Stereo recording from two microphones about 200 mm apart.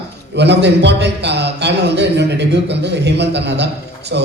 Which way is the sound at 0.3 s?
60° right (ahead or behind).